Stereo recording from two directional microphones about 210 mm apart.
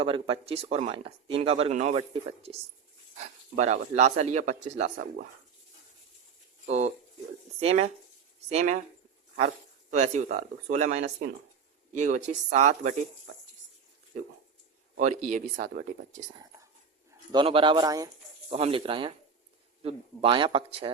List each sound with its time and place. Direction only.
0.0 s speech: 25° right (ahead or behind)
6.7 s speech: 30° right (ahead or behind)
9.9 s speech: 35° right (ahead or behind)
14.9 s speech: 35° right (ahead or behind)
17.3 s speech: 25° right (ahead or behind)
18.5 s speech: 25° right (ahead or behind)